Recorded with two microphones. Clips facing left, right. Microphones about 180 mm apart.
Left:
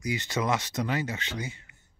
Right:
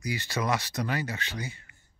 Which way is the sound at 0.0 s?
20° left (ahead or behind).